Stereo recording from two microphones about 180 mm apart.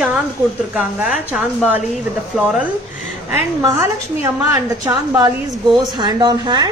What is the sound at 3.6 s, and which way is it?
Speech, 15° right (ahead or behind).